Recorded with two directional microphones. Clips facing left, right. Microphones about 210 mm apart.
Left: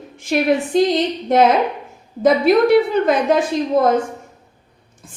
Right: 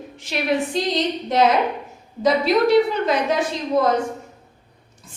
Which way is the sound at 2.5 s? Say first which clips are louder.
Left 3 dB; 50° left (ahead or behind).